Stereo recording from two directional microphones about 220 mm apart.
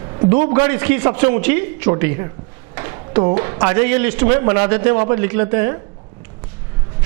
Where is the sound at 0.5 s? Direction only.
15° right (ahead or behind).